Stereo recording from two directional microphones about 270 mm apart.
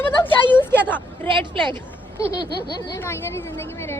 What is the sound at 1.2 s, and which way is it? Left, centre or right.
Speech, centre.